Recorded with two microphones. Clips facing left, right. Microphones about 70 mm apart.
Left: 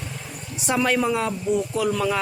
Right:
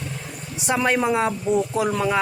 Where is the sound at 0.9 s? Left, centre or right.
Right.